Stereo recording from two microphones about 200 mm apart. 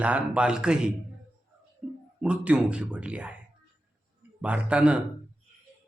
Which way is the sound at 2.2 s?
5° right (ahead or behind).